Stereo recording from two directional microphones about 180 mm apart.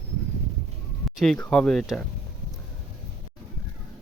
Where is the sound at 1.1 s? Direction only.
Centre (ahead or behind).